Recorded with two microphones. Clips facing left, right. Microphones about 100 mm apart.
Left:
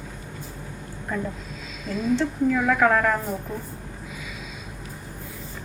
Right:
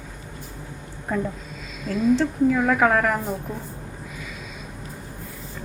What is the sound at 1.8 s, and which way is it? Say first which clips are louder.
A woman's voice: right 3 dB; 5° right (ahead or behind).